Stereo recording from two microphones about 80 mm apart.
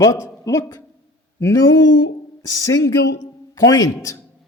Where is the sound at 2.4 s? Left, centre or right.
Left.